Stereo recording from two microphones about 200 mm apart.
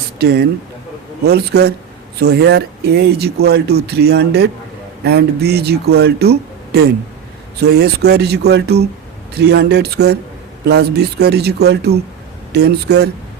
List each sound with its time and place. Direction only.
0.2 s speech: 55° right (ahead or behind)